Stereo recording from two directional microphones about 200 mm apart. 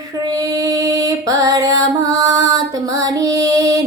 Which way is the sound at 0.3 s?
20° right (ahead or behind).